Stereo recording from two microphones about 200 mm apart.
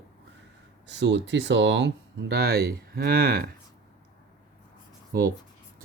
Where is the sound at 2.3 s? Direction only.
50° right (ahead or behind).